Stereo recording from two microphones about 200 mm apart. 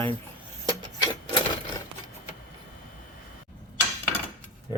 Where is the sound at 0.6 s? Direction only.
20° right (ahead or behind).